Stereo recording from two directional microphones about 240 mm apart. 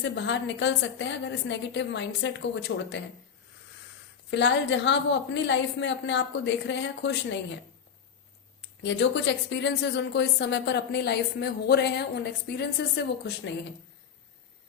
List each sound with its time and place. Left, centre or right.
0.0 s speech: left
4.3 s speech: left
8.6 s speech: left